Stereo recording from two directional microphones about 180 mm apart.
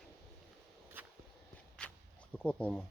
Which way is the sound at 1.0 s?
10° right (ahead or behind).